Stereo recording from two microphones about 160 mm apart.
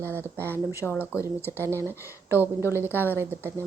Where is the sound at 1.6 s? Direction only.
15° right (ahead or behind).